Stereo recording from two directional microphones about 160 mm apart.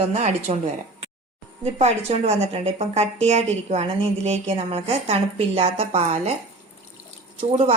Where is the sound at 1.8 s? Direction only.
40° right (ahead or behind).